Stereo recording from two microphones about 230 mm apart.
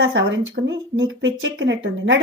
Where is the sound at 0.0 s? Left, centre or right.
Right.